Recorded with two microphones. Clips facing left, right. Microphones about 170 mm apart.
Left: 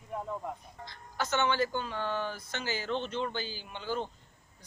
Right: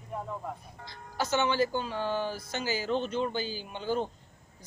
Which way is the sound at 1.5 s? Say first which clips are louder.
Right 3 dB; 30° right (ahead or behind).